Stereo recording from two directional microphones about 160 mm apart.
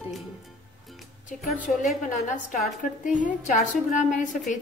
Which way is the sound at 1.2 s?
55° left (ahead or behind).